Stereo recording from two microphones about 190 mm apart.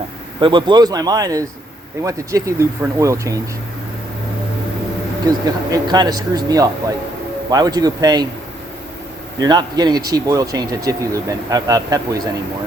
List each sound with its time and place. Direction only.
0.3 s speech: 25° right (ahead or behind)
5.5 s speech: 20° right (ahead or behind)
9.4 s speech: 20° right (ahead or behind)